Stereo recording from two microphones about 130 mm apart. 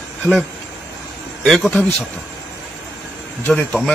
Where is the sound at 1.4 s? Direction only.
Centre (ahead or behind).